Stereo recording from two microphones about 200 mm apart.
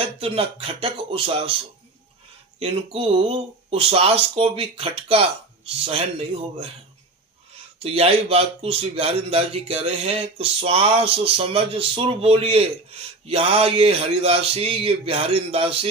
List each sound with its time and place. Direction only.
0.0 s a man's voice: 30° right (ahead or behind)
2.6 s a man's voice: 30° right (ahead or behind)
7.9 s a man's voice: 30° right (ahead or behind)